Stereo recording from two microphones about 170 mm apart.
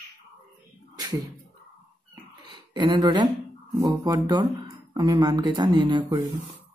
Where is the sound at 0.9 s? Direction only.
25° right (ahead or behind).